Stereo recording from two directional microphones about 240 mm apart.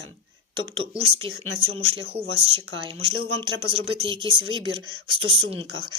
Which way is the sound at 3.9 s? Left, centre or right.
Right.